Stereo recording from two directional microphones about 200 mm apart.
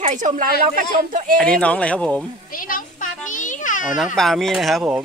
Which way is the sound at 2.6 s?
45° left (ahead or behind).